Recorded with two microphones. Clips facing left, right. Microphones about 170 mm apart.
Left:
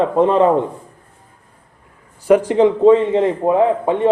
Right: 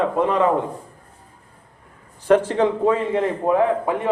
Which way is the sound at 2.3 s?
10° left (ahead or behind).